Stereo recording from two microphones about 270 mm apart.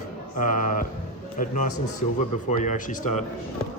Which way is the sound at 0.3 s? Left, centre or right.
Left.